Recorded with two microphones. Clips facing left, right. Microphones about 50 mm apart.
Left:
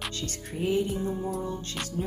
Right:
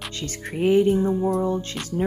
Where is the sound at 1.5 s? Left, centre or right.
Right.